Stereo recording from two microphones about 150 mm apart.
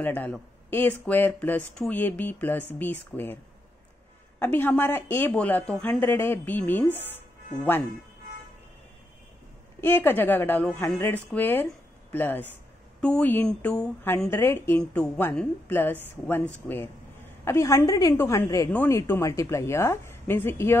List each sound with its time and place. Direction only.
0.0 s speech: 10° left (ahead or behind)
4.4 s speech: 10° left (ahead or behind)
9.8 s speech: 15° left (ahead or behind)
14.8 s a woman's voice: 5° left (ahead or behind)